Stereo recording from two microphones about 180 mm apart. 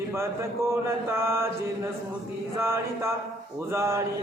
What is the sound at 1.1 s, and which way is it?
Mantra, 15° right (ahead or behind).